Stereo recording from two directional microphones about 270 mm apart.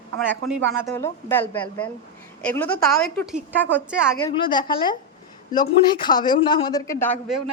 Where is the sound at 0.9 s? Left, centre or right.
Centre.